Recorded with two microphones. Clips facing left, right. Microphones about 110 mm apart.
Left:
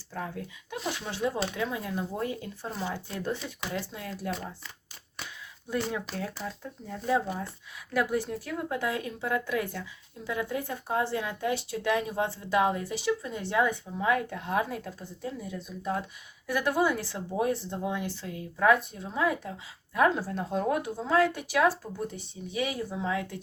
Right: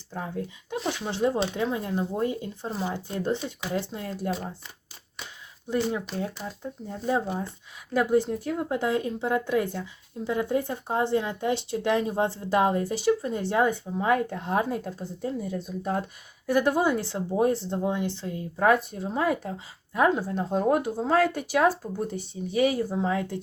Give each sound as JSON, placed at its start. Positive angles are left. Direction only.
{"t": 0.1, "sound": "speech", "side_deg": -20}
{"t": 0.8, "sound": "speech", "side_deg": 0}
{"t": 1.0, "sound": "speech", "side_deg": -30}
{"t": 6.1, "sound": "speech", "side_deg": -25}
{"t": 16.5, "sound": "speech", "side_deg": -30}
{"t": 18.6, "sound": "speech", "side_deg": -45}
{"t": 19.9, "sound": "speech", "side_deg": -20}